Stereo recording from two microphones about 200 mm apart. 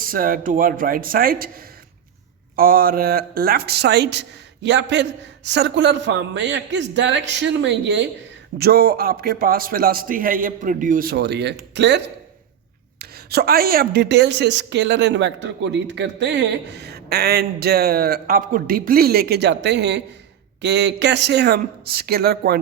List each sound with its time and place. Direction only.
0.1 s speech: 45° right (ahead or behind)
2.6 s a woman's voice: 45° right (ahead or behind); by 8.0 s 60° right (ahead or behind)
8.5 s a woman's voice: 50° right (ahead or behind)